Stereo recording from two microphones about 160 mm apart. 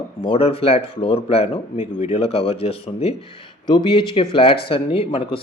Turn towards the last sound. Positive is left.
turn(degrees=35)  # may be behind; listen again after turning